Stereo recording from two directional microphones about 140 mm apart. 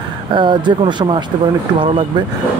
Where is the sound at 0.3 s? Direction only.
35° right (ahead or behind).